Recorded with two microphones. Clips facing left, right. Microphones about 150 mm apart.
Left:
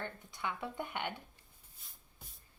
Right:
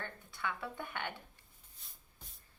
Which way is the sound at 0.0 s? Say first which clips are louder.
Left 1 dB; 15° left (ahead or behind).